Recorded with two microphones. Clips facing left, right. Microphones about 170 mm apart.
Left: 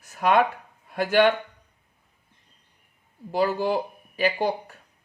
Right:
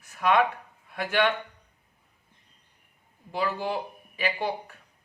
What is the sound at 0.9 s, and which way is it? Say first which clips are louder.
Speech: left 6 dB; 40° left (ahead or behind).